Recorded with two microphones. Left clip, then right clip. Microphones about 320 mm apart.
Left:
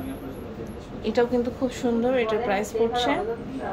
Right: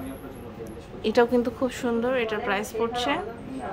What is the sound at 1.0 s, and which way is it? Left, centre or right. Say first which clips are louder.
Speech: right 2 dB; centre.